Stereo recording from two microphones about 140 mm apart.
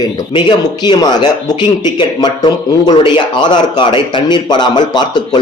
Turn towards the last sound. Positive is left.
turn(degrees=30)  # may be behind; listen again after turning